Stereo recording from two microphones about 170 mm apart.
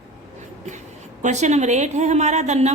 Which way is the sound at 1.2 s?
45° right (ahead or behind).